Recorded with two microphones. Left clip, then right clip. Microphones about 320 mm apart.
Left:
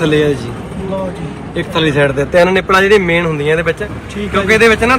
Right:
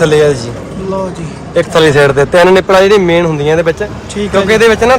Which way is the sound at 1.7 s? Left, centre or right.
Right.